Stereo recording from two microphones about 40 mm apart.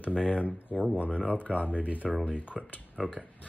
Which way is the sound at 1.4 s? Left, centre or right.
Left.